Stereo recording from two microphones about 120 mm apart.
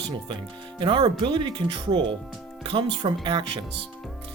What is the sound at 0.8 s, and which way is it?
Speech, 45° right (ahead or behind).